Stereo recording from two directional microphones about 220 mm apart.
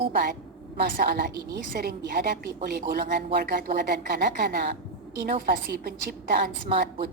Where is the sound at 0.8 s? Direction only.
40° right (ahead or behind).